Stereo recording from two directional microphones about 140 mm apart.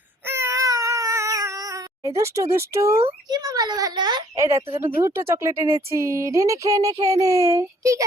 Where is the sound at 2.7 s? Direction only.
20° right (ahead or behind).